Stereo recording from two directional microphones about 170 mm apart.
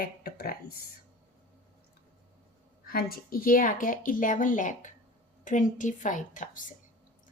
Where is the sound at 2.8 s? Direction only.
60° left (ahead or behind).